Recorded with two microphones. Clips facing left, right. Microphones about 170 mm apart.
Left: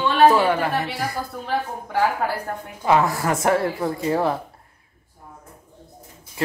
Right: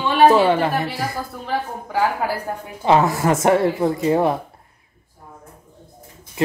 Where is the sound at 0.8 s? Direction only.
Centre (ahead or behind).